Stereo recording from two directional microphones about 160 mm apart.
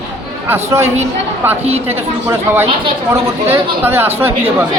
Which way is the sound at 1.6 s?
40° right (ahead or behind).